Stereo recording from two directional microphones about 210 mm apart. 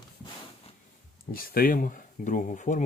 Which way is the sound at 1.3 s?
45° left (ahead or behind).